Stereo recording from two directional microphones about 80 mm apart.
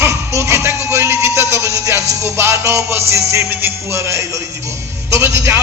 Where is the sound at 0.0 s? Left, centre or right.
Right.